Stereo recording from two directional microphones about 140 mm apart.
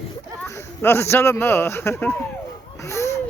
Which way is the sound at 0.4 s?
20° left (ahead or behind).